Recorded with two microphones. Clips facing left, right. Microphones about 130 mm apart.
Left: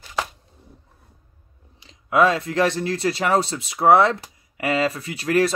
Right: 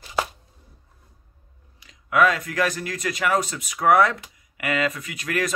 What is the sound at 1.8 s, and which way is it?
Speech, 25° left (ahead or behind).